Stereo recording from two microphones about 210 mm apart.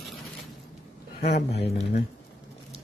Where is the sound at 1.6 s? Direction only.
30° left (ahead or behind).